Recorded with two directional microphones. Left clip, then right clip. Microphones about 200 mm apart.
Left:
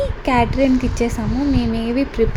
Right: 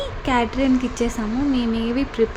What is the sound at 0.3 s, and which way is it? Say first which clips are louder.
A woman's voice: left 3 dB; 5° left (ahead or behind).